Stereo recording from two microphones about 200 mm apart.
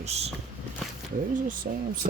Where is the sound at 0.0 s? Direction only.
35° right (ahead or behind).